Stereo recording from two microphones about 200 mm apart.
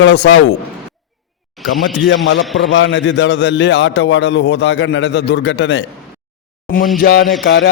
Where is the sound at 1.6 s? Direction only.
Centre (ahead or behind).